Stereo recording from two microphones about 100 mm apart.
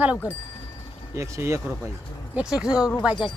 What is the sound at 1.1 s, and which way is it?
Speech, 30° right (ahead or behind).